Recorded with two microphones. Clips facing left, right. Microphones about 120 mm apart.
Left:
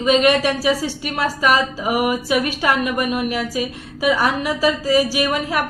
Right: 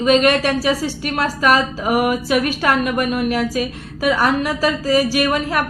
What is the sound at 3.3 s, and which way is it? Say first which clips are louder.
Speech: right 3 dB; 55° right (ahead or behind).